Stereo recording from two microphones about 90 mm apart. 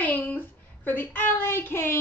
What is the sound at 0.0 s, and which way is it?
Speech, 20° left (ahead or behind).